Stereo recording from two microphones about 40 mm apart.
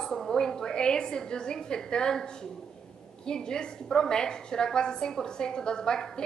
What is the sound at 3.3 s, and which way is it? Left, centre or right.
A woman's voice, centre.